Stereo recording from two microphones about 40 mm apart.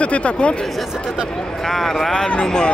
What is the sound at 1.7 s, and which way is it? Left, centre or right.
Speech, centre.